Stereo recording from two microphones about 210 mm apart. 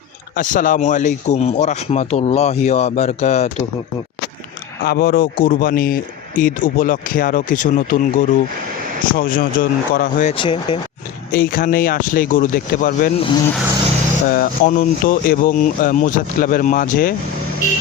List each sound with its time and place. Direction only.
0.3 s a man's voice: 40° left (ahead or behind)
4.8 s a man's voice: 45° left (ahead or behind)
10.3 s speech: 20° left (ahead or behind)
11.3 s a man's voice: 45° left (ahead or behind); by 13.4 s 25° left (ahead or behind)
14.3 s a man's voice: 45° left (ahead or behind)